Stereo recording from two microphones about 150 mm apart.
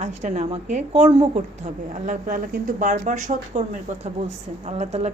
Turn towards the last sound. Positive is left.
turn(degrees=-45)  # may be behind; listen again after turning